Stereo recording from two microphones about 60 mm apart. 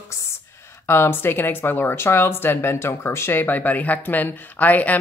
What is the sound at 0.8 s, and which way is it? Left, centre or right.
A woman's voice, left.